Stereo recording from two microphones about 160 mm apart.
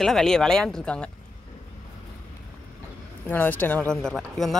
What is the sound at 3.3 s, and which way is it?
Speech, 10° left (ahead or behind).